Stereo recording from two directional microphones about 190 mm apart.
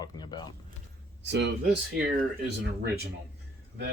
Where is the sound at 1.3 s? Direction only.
65° right (ahead or behind).